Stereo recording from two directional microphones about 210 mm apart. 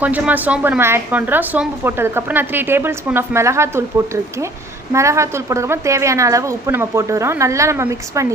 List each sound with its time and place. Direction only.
0.0 s a woman's voice: 5° right (ahead or behind)